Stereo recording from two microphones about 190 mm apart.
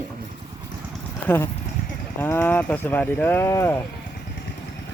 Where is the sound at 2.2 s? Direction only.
10° left (ahead or behind).